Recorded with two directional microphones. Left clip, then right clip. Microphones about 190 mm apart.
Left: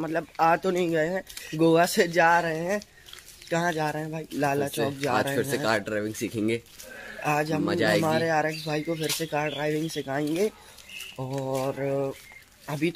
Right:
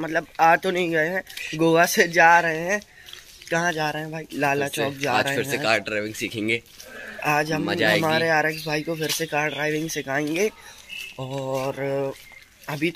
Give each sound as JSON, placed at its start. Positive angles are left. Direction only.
{"t": 0.0, "sound": "speech", "side_deg": -5}
{"t": 5.4, "sound": "speech", "side_deg": 25}
{"t": 7.2, "sound": "speech", "side_deg": -10}
{"t": 7.6, "sound": "speech", "side_deg": 15}
{"t": 8.2, "sound": "speech", "side_deg": -10}
{"t": 11.1, "sound": "speech", "side_deg": 5}